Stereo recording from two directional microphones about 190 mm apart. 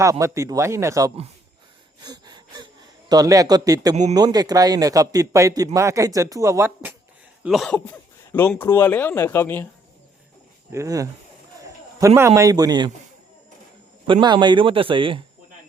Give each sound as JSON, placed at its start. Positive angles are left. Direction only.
{"t": 0.0, "sound": "speech", "side_deg": -15}
{"t": 2.0, "sound": "gasp", "side_deg": -20}
{"t": 3.1, "sound": "a man's voice", "side_deg": -20}
{"t": 7.4, "sound": "a sound", "side_deg": 0}
{"t": 7.9, "sound": "speech", "side_deg": 10}
{"t": 10.7, "sound": "a man's voice", "side_deg": -15}
{"t": 14.1, "sound": "a man's voice", "side_deg": -25}